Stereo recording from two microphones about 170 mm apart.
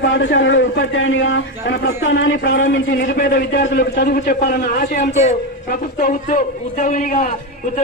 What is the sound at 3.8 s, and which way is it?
A man's voice, 80° left.